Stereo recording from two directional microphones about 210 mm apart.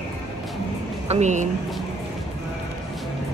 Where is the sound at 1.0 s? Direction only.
30° right (ahead or behind).